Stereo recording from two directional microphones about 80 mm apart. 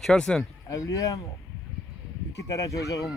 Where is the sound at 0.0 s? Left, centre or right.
Centre.